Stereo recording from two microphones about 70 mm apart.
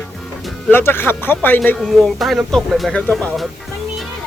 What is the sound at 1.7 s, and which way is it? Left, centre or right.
Speech, centre.